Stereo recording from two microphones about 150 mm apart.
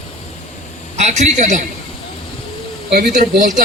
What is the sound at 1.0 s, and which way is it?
Speech, 50° right (ahead or behind).